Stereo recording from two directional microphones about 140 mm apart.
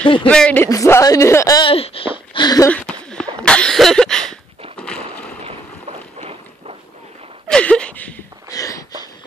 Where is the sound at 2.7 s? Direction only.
5° left (ahead or behind).